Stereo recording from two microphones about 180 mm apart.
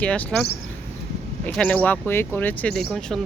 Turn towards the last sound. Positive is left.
turn(degrees=0)  # may be behind; listen again after turning